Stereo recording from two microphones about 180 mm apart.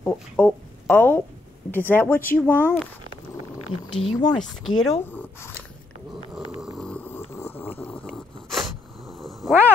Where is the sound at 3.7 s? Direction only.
25° left (ahead or behind).